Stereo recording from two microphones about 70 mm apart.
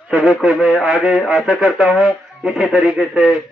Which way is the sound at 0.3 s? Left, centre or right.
Centre.